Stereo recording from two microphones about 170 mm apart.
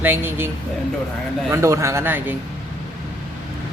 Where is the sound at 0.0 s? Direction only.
10° right (ahead or behind).